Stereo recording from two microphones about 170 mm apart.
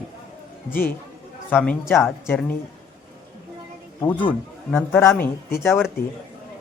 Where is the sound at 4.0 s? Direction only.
10° left (ahead or behind).